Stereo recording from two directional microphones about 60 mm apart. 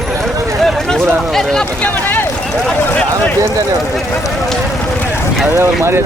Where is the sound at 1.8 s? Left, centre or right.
Left.